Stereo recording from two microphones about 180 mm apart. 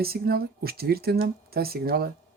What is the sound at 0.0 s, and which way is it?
Speech, 60° right (ahead or behind).